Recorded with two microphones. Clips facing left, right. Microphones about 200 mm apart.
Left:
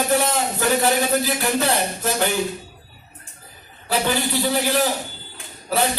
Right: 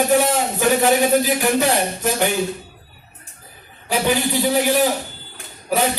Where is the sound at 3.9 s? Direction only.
15° right (ahead or behind).